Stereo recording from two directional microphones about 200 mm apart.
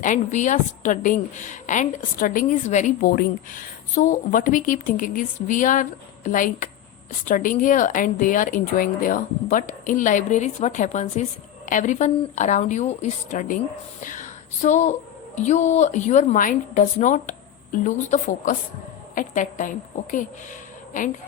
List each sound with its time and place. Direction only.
0.0 s a woman's voice: 40° left (ahead or behind)